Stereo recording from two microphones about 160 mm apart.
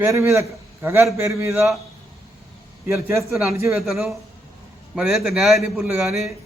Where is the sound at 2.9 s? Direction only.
15° right (ahead or behind).